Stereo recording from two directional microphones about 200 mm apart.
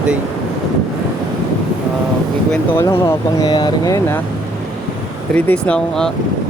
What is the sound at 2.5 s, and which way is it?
Speech, 15° left (ahead or behind).